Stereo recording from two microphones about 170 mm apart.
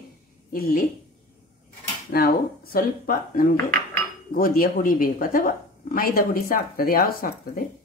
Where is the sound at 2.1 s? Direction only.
60° left (ahead or behind).